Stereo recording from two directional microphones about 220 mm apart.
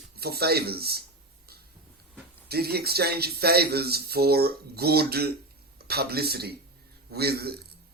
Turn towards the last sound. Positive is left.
turn(degrees=-45)  # may be behind; listen again after turning